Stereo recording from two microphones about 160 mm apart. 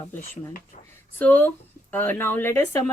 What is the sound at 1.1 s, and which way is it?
Speech, 10° left (ahead or behind).